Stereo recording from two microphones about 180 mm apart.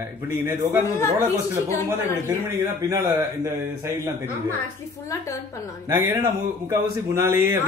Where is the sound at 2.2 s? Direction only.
15° right (ahead or behind).